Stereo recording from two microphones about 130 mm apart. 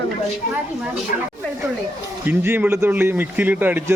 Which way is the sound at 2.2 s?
15° right (ahead or behind).